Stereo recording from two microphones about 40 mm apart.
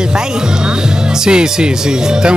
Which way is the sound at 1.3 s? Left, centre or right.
Right.